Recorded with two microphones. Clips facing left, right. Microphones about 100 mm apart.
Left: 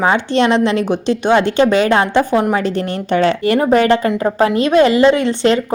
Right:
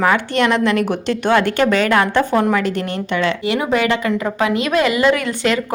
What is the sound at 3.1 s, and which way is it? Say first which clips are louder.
A woman's voice: left 6 dB; 40° left (ahead or behind).